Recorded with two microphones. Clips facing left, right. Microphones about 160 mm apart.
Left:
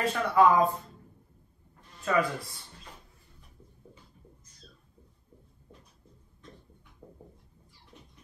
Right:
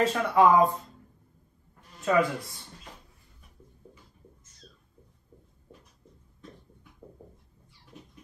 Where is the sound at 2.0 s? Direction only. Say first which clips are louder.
Right 3 dB; 20° right (ahead or behind).